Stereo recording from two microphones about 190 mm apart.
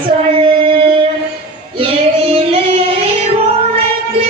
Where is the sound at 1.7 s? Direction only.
30° right (ahead or behind).